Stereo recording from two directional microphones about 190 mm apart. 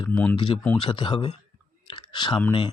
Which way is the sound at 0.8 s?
25° left (ahead or behind).